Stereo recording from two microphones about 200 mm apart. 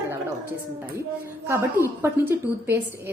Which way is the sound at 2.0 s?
10° right (ahead or behind).